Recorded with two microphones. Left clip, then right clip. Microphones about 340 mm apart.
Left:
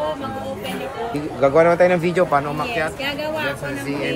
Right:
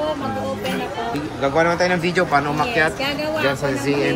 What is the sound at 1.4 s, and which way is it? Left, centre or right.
A man's voice, centre.